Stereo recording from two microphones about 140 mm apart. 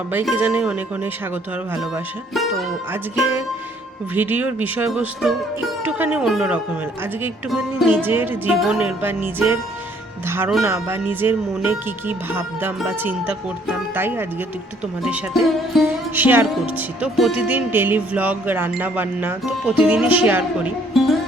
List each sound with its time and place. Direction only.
0.3 s speech: 15° right (ahead or behind)
2.3 s speech: centre (ahead or behind)
2.9 s speech: 15° right (ahead or behind)
4.9 s speech: centre (ahead or behind)
5.5 s speech: 10° right (ahead or behind)
7.9 s speech: 15° right (ahead or behind)
15.0 s speech: centre (ahead or behind)
16.1 s speech: 15° right (ahead or behind)